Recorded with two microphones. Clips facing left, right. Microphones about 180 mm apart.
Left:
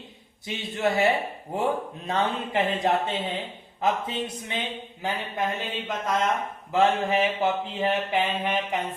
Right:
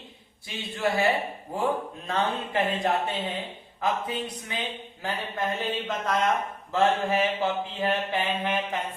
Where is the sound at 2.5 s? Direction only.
Centre (ahead or behind).